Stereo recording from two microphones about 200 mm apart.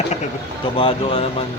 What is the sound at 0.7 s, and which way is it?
Speech, 25° left (ahead or behind).